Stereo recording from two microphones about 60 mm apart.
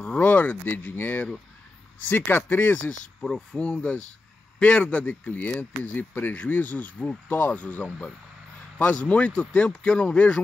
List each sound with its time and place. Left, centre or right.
0.0 s speech: left
2.8 s a man's voice: centre